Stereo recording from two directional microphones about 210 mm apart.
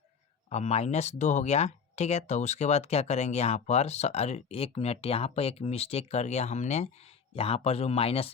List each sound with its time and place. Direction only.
0.5 s speech: 30° left (ahead or behind)